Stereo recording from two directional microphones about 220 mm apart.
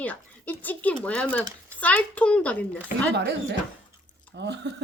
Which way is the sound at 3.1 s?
50° right (ahead or behind).